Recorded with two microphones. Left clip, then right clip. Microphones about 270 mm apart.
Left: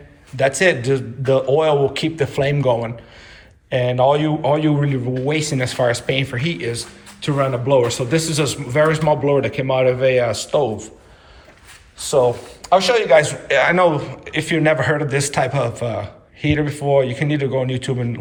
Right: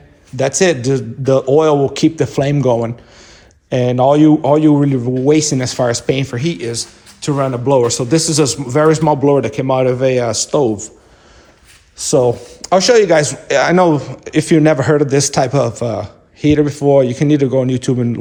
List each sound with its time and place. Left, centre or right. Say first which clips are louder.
0.3 s speech: right 2 dB; right
11.9 s speech: right 3 dB; right